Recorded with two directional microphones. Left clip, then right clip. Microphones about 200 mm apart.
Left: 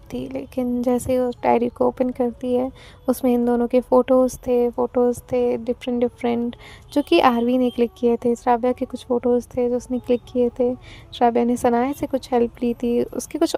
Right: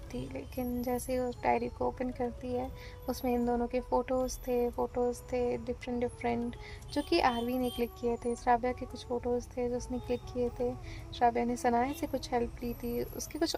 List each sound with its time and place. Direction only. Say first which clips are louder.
0.1 s speech: left 12 dB; 40° left (ahead or behind)